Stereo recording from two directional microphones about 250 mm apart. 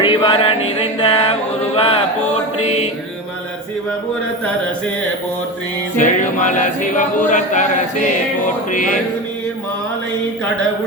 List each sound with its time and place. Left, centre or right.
0.0 s a capella: centre
1.7 s speech: left
2.6 s a capella: left
6.0 s a capella: left